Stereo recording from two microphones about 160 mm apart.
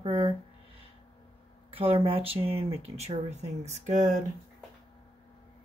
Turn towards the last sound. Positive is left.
turn(degrees=-50)  # may be behind; listen again after turning